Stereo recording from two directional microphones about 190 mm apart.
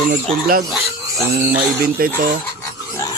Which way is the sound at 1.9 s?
50° right (ahead or behind).